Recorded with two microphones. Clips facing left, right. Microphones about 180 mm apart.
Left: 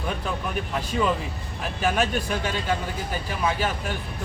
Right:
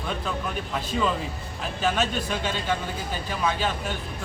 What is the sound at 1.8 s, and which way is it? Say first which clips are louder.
Speech: left 1 dB; 10° left (ahead or behind).